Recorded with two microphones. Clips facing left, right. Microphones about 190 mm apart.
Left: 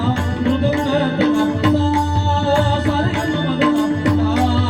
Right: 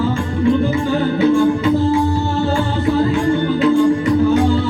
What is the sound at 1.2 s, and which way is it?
Music, 75° left (ahead or behind).